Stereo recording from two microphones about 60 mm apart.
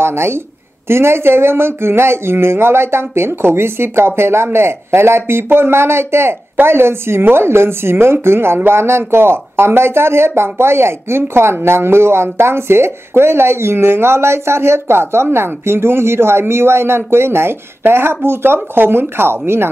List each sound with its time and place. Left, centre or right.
0.0 s speech: right